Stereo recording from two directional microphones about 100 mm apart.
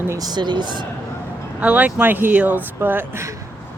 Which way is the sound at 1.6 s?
15° right (ahead or behind).